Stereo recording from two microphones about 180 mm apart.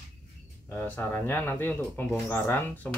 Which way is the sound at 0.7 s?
10° left (ahead or behind).